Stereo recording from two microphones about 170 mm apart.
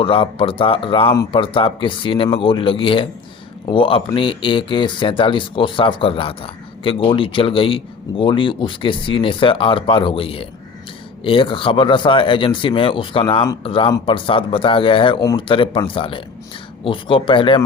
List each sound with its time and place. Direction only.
0.0 s speech: 30° left (ahead or behind)